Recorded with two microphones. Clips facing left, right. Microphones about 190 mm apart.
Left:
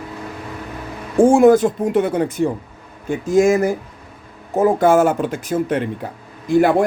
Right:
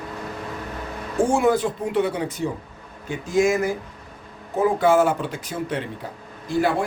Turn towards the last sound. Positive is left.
turn(degrees=55)  # may be behind; listen again after turning